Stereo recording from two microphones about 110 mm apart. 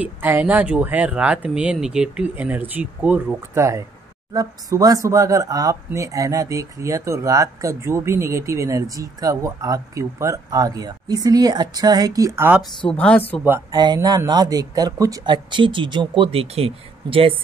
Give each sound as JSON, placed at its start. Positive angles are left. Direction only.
{"t": 0.0, "sound": "speech", "side_deg": -15}
{"t": 3.5, "sound": "speech", "side_deg": -25}
{"t": 12.9, "sound": "speech", "side_deg": 10}
{"t": 13.7, "sound": "speech", "side_deg": -35}